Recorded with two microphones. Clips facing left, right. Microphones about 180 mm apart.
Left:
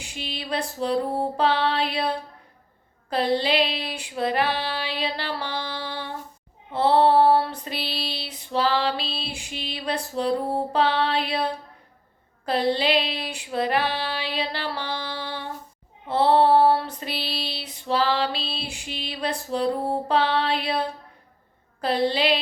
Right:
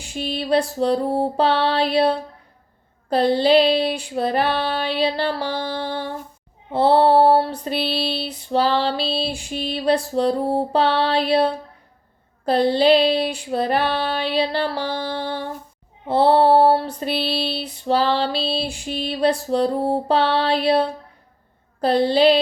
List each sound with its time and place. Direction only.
0.2 s music: 50° right (ahead or behind)
0.4 s music: 35° right (ahead or behind)
4.4 s female singing: 55° right (ahead or behind)
4.9 s music: 35° right (ahead or behind)
6.7 s child singing: 35° right (ahead or behind)
7.1 s music: 35° right (ahead or behind)
9.5 s music: 45° right (ahead or behind)
12.5 s music: 35° right (ahead or behind)
13.8 s female singing: 55° right (ahead or behind)
14.3 s music: 35° right (ahead or behind)
16.0 s music: 35° right (ahead or behind)
18.9 s music: 45° right (ahead or behind)